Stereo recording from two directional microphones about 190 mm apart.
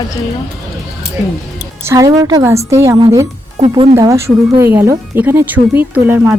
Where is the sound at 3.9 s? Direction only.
15° right (ahead or behind).